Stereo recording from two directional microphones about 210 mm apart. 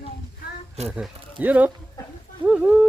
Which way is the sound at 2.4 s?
5° right (ahead or behind).